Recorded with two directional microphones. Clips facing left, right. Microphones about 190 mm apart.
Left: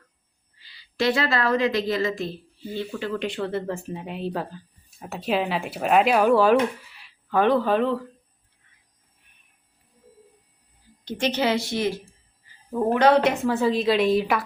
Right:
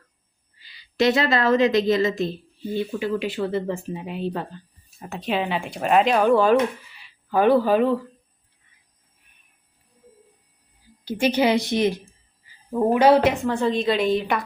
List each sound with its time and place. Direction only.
0.6 s a woman's voice: 15° right (ahead or behind)
11.0 s speech: 10° right (ahead or behind)